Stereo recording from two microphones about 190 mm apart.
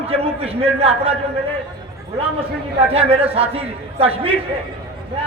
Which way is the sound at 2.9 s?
30° right (ahead or behind).